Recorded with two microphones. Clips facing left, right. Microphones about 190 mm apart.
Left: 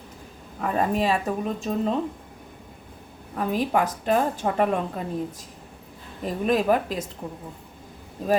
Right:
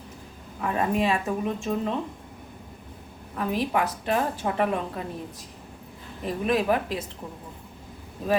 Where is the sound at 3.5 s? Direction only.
45° left (ahead or behind).